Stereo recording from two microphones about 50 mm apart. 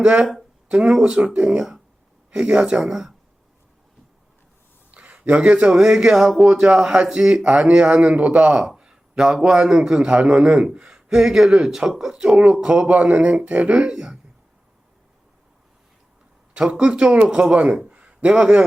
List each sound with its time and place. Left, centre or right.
0.0 s speech: centre
4.9 s a sound: right
5.7 s speech: centre
6.5 s a man's voice: right
13.9 s speech: centre
16.6 s a man's voice: centre
17.9 s a sound: right